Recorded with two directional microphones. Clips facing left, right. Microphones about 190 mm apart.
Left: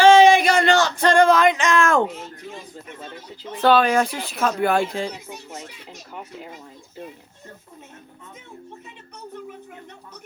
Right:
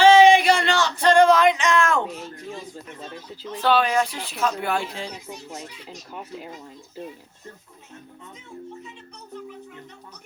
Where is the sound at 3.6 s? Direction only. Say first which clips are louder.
Left 4 dB; 50° left (ahead or behind).